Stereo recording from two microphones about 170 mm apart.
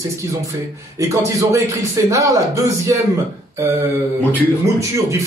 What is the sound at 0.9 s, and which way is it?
Speech, 20° right (ahead or behind).